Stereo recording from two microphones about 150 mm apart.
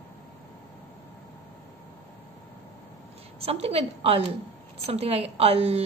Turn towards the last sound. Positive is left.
turn(degrees=-45)  # may be behind; listen again after turning